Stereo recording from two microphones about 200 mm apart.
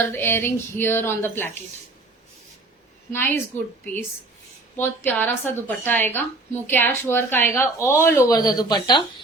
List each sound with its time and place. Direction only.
0.0 s a woman's voice: 10° left (ahead or behind)
3.1 s a woman's voice: 10° left (ahead or behind)